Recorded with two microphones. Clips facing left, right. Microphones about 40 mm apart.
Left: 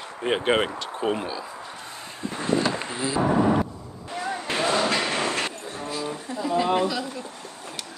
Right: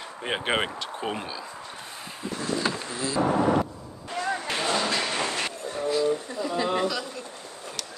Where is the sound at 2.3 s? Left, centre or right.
Left.